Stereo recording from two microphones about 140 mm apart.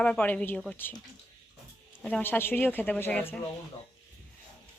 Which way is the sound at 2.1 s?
15° left (ahead or behind).